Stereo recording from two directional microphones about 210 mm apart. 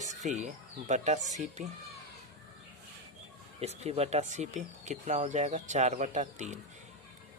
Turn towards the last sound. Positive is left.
turn(degrees=-35)  # may be behind; listen again after turning